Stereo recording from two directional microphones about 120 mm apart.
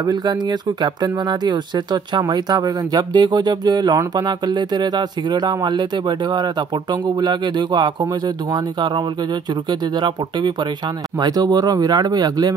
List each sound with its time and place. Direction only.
0.0 s speech: 35° right (ahead or behind)
9.7 s speech: 40° right (ahead or behind)